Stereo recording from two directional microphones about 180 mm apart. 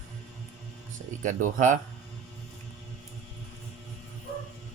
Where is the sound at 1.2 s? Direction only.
45° right (ahead or behind).